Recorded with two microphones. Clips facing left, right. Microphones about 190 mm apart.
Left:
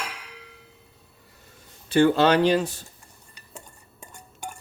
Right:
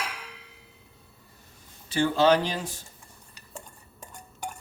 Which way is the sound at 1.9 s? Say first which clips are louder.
Left 3 dB; 65° left (ahead or behind).